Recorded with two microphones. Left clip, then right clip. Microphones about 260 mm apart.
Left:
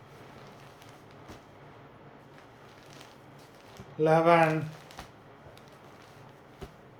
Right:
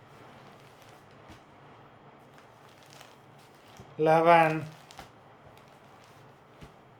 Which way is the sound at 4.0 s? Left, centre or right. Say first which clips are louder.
Right 1 dB; centre.